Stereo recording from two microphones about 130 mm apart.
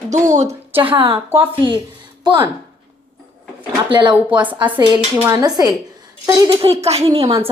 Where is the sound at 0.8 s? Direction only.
45° right (ahead or behind).